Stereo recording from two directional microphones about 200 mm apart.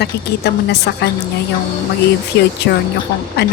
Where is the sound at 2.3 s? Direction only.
60° left (ahead or behind).